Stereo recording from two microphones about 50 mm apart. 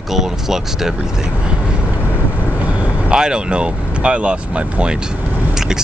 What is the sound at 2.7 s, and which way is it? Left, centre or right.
Vehicle, right.